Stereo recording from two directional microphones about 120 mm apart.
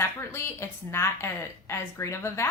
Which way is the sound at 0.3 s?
20° left (ahead or behind).